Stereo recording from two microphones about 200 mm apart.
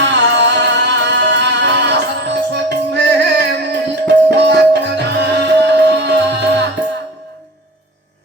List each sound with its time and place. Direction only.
0.0 s music: 60° right (ahead or behind)